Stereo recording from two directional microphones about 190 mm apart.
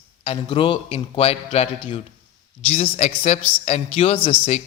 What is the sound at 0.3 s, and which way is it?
A man's voice, 25° left (ahead or behind).